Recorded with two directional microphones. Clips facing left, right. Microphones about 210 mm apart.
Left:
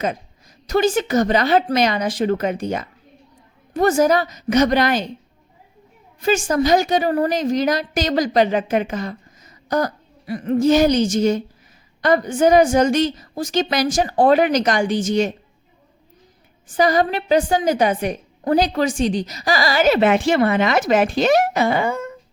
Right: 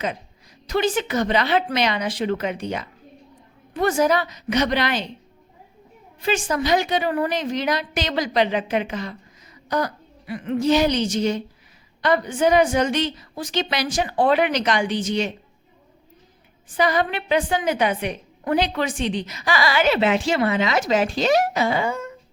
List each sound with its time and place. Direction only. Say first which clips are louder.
0.7 s a woman's voice: left 4 dB; 45° left (ahead or behind)
6.2 s a woman's voice: left 5 dB; 45° left (ahead or behind)
16.6 s a woman's voice: left 4 dB; 45° left (ahead or behind)